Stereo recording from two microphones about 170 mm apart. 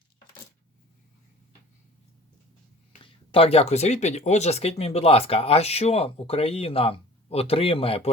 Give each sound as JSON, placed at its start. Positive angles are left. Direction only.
{"t": 3.0, "sound": "speech", "side_deg": 35}